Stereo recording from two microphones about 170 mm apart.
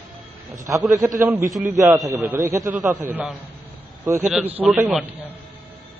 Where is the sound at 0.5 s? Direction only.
20° right (ahead or behind).